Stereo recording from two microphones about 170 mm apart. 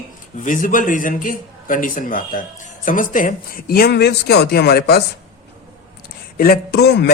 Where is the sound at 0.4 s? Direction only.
50° left (ahead or behind); by 5.0 s 70° left (ahead or behind).